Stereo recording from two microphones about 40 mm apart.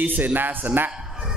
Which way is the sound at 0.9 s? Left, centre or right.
Centre.